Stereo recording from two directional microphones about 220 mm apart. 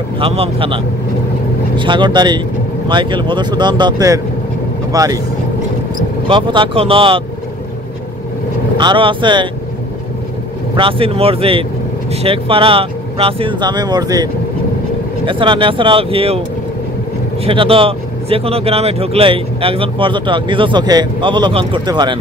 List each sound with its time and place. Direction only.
0.2 s speech: 25° right (ahead or behind)
6.2 s speech: 25° right (ahead or behind)
8.7 s speech: 20° right (ahead or behind)
10.8 s speech: 25° right (ahead or behind)
17.5 s speech: 25° right (ahead or behind)